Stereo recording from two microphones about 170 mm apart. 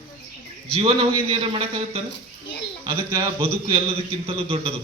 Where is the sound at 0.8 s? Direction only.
30° right (ahead or behind).